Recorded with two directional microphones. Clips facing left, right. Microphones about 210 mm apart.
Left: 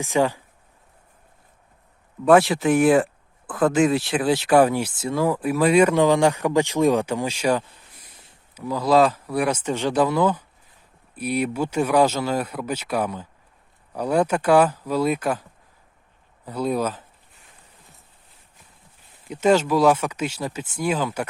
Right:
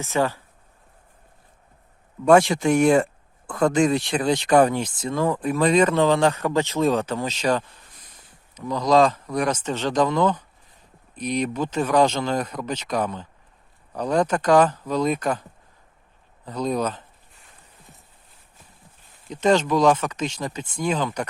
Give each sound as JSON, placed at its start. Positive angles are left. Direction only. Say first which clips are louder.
{"t": 0.0, "sound": "speech", "louder": "left 2 dB", "side_deg": 15}
{"t": 2.2, "sound": "speech", "louder": "even", "side_deg": 5}
{"t": 16.5, "sound": "speech", "louder": "left 1 dB", "side_deg": 10}
{"t": 19.3, "sound": "speech", "louder": "left 1 dB", "side_deg": 10}